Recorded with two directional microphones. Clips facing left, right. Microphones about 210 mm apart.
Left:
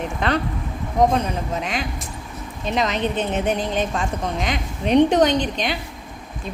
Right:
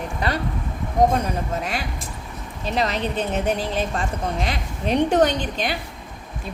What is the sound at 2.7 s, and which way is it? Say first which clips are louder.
Speech: left 1 dB; 35° right (ahead or behind).